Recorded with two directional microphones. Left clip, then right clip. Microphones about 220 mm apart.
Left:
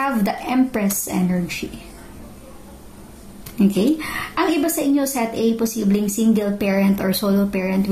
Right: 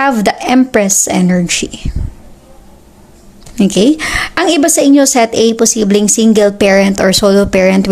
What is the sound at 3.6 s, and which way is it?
A woman's voice, 45° right (ahead or behind).